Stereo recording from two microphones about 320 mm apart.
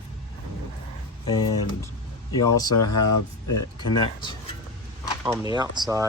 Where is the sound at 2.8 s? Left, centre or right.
Left.